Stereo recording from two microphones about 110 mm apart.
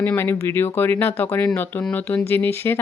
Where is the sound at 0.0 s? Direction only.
20° left (ahead or behind).